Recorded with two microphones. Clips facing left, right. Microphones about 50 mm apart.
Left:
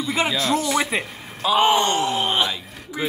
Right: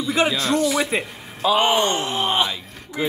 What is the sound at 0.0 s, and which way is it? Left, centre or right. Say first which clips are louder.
Speech: right 2 dB; centre.